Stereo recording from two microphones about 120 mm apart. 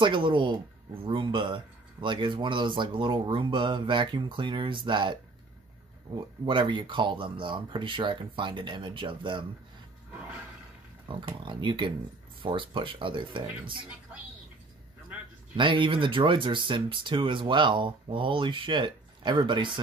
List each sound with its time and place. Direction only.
0.0 s speech: 45° right (ahead or behind)
6.4 s speech: 45° right (ahead or behind)
10.1 s roar: 10° right (ahead or behind)
11.1 s speech: 40° right (ahead or behind)
15.5 s speech: 40° right (ahead or behind)